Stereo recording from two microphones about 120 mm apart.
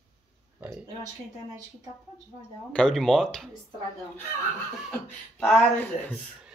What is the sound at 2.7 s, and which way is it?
Speech, 5° left (ahead or behind).